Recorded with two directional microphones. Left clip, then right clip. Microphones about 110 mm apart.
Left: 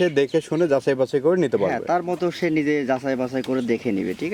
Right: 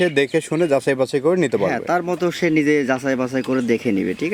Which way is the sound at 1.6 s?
35° right (ahead or behind).